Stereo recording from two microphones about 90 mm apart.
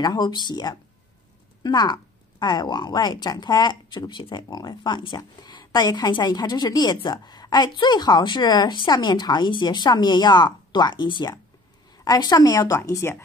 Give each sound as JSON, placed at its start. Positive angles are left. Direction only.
{"t": 0.0, "sound": "a woman's voice", "side_deg": 50}
{"t": 12.7, "sound": "speech", "side_deg": 30}